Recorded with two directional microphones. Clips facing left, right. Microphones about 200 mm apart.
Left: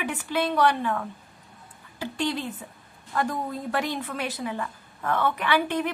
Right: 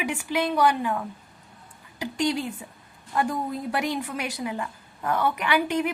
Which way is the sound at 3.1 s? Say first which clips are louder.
Right 2 dB; 10° right (ahead or behind).